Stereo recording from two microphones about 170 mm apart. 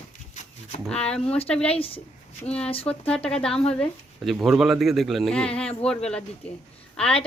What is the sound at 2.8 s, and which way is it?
A woman's voice, 5° left (ahead or behind).